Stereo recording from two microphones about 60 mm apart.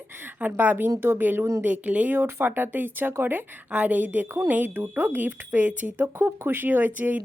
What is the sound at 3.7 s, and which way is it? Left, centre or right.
A woman's voice, right.